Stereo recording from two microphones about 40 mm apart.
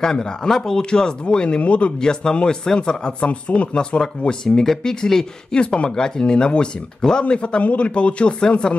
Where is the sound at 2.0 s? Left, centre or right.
Centre.